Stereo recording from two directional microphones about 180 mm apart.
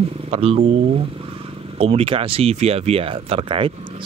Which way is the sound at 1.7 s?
30° right (ahead or behind).